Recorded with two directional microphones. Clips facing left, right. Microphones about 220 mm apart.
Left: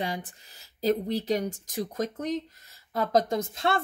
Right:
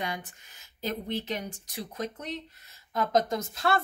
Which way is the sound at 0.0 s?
35° left (ahead or behind).